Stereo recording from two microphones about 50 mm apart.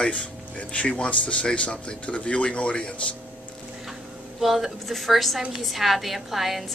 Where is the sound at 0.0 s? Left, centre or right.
Left.